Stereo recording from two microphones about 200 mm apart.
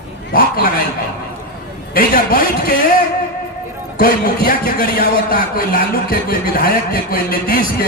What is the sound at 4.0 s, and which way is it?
A man's voice, 45° left (ahead or behind).